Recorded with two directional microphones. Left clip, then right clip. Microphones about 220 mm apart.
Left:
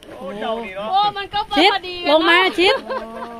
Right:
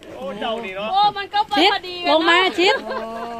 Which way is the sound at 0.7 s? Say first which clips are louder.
Even; centre (ahead or behind).